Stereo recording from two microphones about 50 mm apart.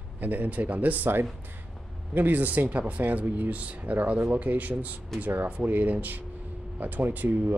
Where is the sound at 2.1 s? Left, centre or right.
Right.